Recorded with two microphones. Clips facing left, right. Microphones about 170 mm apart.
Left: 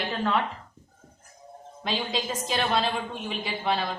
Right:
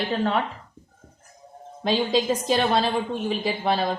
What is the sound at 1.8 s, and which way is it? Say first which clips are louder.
A woman's voice: right 8 dB; 40° right (ahead or behind).